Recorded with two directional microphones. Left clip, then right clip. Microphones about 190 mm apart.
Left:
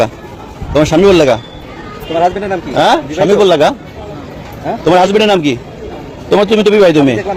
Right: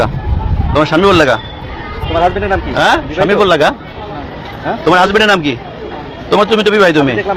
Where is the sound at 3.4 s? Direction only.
50° left (ahead or behind).